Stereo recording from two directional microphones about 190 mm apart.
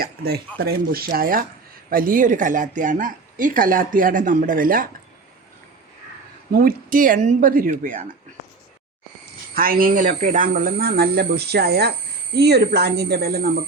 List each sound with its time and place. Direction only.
0.0 s speech: 55° right (ahead or behind)
6.5 s speech: 50° right (ahead or behind)
9.6 s speech: 50° right (ahead or behind)